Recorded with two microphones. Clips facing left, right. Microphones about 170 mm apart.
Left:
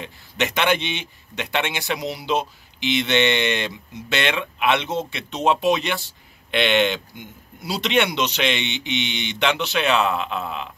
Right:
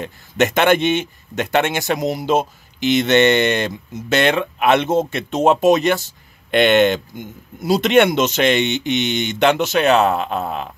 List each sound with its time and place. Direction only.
0.0 s speech: 45° right (ahead or behind)